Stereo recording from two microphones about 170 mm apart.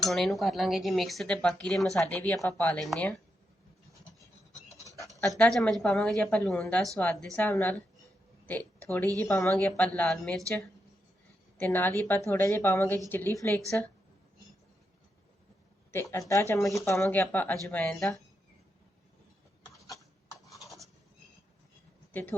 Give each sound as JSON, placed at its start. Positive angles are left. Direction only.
{"t": 0.0, "sound": "speech", "side_deg": 0}
{"t": 4.7, "sound": "a sound", "side_deg": -20}
{"t": 5.4, "sound": "a woman's voice", "side_deg": 5}
{"t": 11.5, "sound": "a woman's voice", "side_deg": 10}
{"t": 16.3, "sound": "a woman's voice", "side_deg": 15}
{"t": 20.6, "sound": "a sound", "side_deg": 0}